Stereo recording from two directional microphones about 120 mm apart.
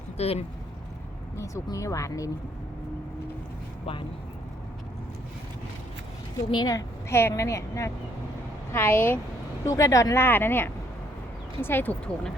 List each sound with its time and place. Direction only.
0.2 s speech: 60° left (ahead or behind)
1.4 s a woman's voice: 25° left (ahead or behind)
6.5 s a woman's voice: 35° left (ahead or behind); by 12.3 s 10° left (ahead or behind)